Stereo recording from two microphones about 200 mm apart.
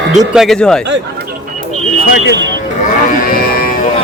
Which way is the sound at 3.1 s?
45° left (ahead or behind).